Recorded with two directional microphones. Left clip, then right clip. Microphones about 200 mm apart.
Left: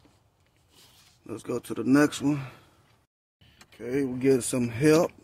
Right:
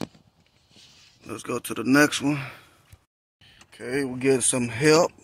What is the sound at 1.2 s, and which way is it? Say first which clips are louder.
Speech: right 2 dB; 5° left (ahead or behind).